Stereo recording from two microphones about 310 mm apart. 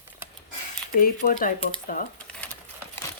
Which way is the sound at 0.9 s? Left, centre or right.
Left.